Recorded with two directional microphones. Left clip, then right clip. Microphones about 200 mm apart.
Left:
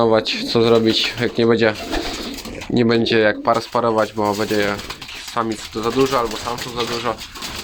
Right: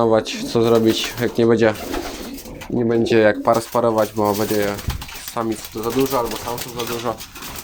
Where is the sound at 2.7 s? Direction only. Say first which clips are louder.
Left 3 dB; 20° left (ahead or behind).